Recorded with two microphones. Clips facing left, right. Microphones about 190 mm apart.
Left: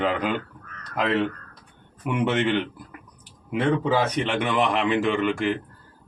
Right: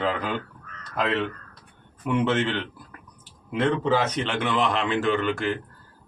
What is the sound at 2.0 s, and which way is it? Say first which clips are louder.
A man's voice: even; 15° left (ahead or behind).